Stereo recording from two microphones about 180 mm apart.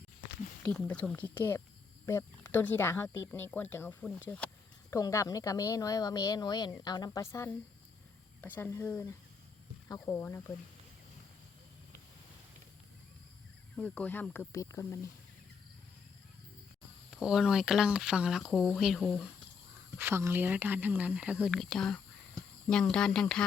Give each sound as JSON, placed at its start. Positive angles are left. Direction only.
{"t": 0.6, "sound": "a woman's voice", "side_deg": 5}
{"t": 13.7, "sound": "speech", "side_deg": 5}
{"t": 17.1, "sound": "speech", "side_deg": -5}
{"t": 20.0, "sound": "speech", "side_deg": -15}